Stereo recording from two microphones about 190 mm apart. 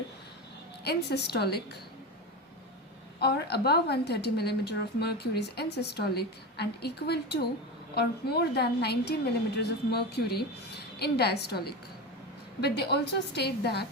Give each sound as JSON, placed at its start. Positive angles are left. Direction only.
{"t": 0.9, "sound": "a woman's voice", "side_deg": 60}
{"t": 3.2, "sound": "a woman's voice", "side_deg": 60}